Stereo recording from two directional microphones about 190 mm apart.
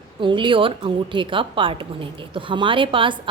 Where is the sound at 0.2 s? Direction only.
25° right (ahead or behind).